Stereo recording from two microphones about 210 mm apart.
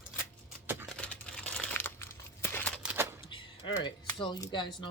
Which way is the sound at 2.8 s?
10° right (ahead or behind).